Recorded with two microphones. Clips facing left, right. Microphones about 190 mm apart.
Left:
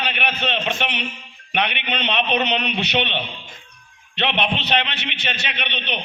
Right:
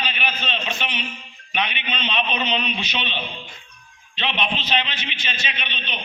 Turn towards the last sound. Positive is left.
turn(degrees=65)  # may be behind; listen again after turning